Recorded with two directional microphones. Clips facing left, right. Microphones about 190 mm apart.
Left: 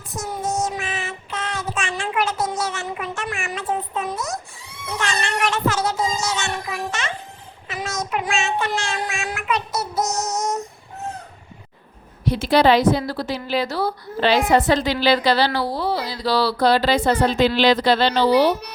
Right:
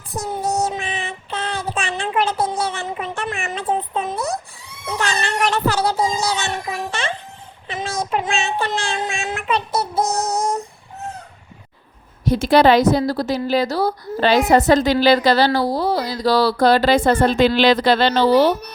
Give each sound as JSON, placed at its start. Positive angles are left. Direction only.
{"t": 0.2, "sound": "child singing", "side_deg": -35}
{"t": 4.9, "sound": "music", "side_deg": -35}
{"t": 7.7, "sound": "child singing", "side_deg": -30}
{"t": 12.2, "sound": "a woman's voice", "side_deg": -45}